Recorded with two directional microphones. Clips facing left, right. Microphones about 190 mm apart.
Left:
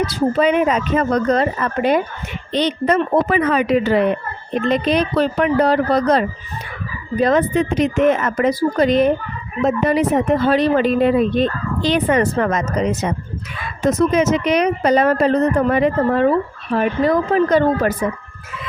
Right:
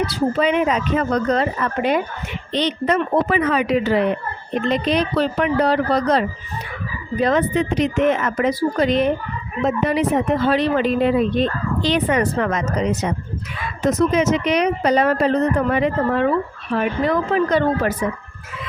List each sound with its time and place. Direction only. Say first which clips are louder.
0.1 s speech: left 2 dB; 45° left (ahead or behind)